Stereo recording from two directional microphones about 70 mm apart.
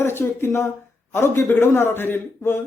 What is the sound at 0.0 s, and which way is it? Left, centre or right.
A man's voice, left.